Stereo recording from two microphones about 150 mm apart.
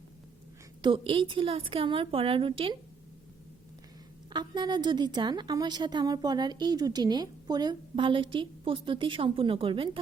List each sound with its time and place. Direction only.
0.8 s a woman's voice: 35° right (ahead or behind)
4.3 s a woman's voice: 30° right (ahead or behind)